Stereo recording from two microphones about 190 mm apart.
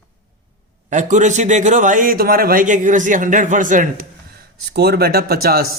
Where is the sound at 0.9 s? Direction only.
40° right (ahead or behind).